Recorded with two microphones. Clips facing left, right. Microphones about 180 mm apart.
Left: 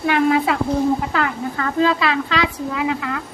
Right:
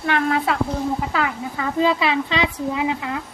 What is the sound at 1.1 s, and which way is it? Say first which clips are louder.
A woman's voice: left 2 dB; 5° right (ahead or behind).